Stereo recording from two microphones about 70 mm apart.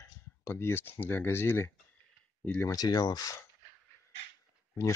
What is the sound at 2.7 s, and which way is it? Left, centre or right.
Speech, left.